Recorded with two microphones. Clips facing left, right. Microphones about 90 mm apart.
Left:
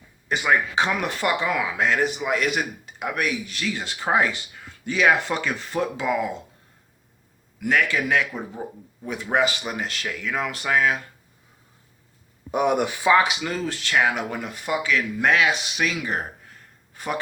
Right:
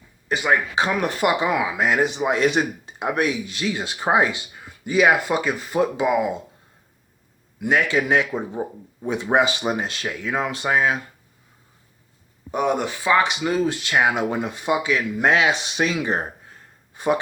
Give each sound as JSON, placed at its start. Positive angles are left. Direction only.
{"t": 0.3, "sound": "speech", "side_deg": -30}
{"t": 1.0, "sound": "speech", "side_deg": -15}
{"t": 7.6, "sound": "speech", "side_deg": -20}
{"t": 12.5, "sound": "speech", "side_deg": 10}
{"t": 13.1, "sound": "speech", "side_deg": 0}
{"t": 13.4, "sound": "speech", "side_deg": -15}